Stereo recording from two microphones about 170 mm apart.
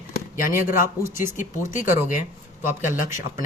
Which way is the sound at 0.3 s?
50° left (ahead or behind).